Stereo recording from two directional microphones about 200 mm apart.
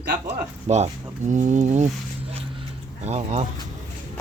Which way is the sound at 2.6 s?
35° right (ahead or behind).